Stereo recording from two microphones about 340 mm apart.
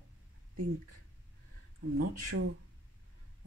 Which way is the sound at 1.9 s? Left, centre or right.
Right.